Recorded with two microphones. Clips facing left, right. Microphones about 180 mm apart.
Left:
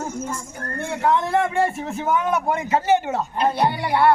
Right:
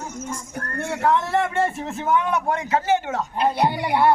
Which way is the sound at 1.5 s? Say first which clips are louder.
Left 1 dB; centre (ahead or behind).